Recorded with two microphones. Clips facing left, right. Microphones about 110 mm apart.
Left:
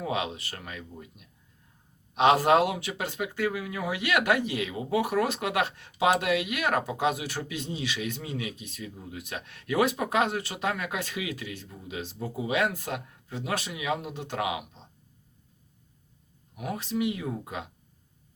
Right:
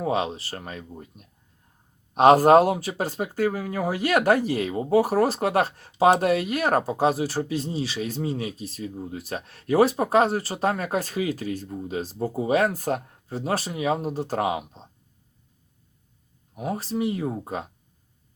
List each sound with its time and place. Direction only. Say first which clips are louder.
0.0 s speech: right 5 dB; 35° right (ahead or behind)
16.6 s speech: right 3 dB; 35° right (ahead or behind)